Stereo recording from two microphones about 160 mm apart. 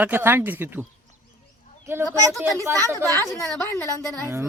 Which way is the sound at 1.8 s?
15° right (ahead or behind).